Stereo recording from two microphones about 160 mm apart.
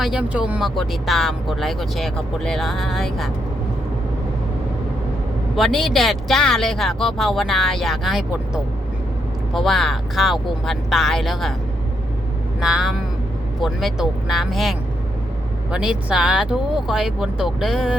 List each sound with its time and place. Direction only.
0.0 s speech: 5° right (ahead or behind)
5.5 s speech: centre (ahead or behind)
12.5 s speech: 5° right (ahead or behind)